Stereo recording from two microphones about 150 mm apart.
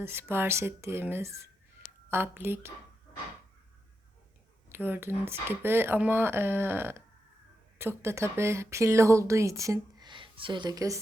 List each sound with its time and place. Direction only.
0.0 s speech: 15° right (ahead or behind)
4.7 s speech: 15° right (ahead or behind)